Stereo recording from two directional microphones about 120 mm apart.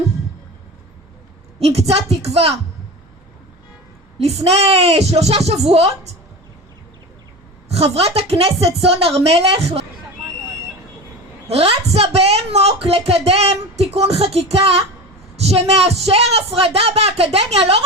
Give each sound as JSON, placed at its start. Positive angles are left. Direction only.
{"t": 1.5, "sound": "a woman's voice", "side_deg": -60}
{"t": 4.5, "sound": "a woman's voice", "side_deg": -60}
{"t": 7.7, "sound": "a woman's voice", "side_deg": -55}
{"t": 11.4, "sound": "a woman's voice", "side_deg": -55}